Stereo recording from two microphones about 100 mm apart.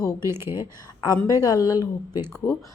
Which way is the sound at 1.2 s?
35° left (ahead or behind).